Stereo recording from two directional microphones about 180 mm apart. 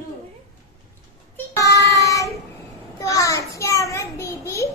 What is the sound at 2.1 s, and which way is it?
Child singing, 15° left (ahead or behind).